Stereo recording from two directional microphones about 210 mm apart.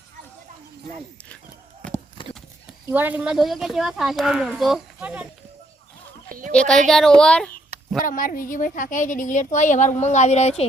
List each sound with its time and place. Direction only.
2.2 s clip-clop: 25° left (ahead or behind)
2.8 s speech: 10° right (ahead or behind)
6.2 s sheep: 40° right (ahead or behind)
6.5 s speech: 5° left (ahead or behind)
8.0 s a woman's voice: 40° left (ahead or behind)